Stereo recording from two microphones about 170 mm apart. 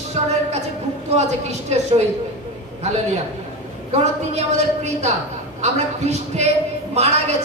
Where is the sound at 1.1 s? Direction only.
40° right (ahead or behind).